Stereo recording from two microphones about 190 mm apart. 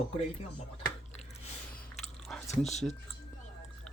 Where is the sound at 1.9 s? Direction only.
35° left (ahead or behind).